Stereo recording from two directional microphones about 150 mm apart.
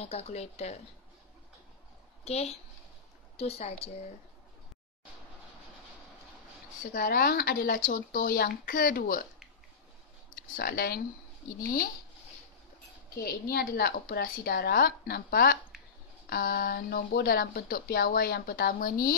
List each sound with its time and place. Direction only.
0.0 s speech: 45° left (ahead or behind)
2.2 s a woman's voice: 45° left (ahead or behind)
6.8 s speech: 70° left (ahead or behind)
10.5 s speech: 80° left
13.1 s a woman's voice: 90° left; by 19.1 s 70° left (ahead or behind)